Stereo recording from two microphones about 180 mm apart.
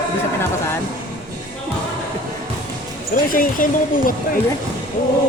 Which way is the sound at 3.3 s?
50° left (ahead or behind).